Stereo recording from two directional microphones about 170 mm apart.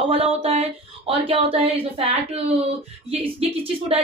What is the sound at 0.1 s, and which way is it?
A woman's voice, 35° right (ahead or behind).